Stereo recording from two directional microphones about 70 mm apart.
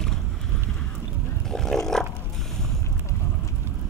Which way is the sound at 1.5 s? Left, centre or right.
Centre.